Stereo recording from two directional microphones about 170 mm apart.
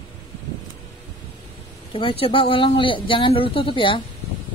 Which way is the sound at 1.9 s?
30° left (ahead or behind).